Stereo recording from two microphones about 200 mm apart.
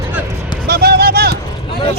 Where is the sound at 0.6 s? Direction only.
50° right (ahead or behind).